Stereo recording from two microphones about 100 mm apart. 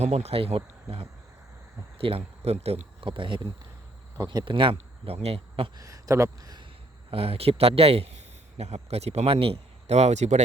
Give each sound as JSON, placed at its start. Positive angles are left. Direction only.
{"t": 0.0, "sound": "speech", "side_deg": -90}
{"t": 3.1, "sound": "speech", "side_deg": -55}
{"t": 5.7, "sound": "speech", "side_deg": -35}
{"t": 7.1, "sound": "a man's voice", "side_deg": -75}